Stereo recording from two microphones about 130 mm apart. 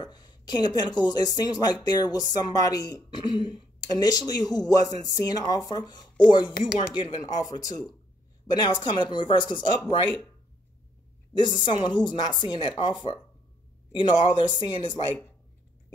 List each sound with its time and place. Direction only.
0.0 s speech: 35° left (ahead or behind)
8.8 s speech: 35° left (ahead or behind)
11.3 s speech: 35° left (ahead or behind)